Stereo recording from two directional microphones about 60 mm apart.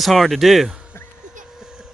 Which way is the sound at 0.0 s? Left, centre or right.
Centre.